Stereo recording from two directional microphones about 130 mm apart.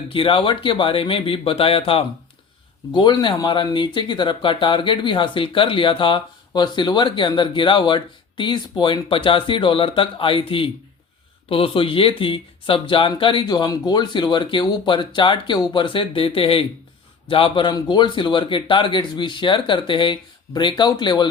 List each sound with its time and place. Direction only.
0.1 s speech: 40° left (ahead or behind)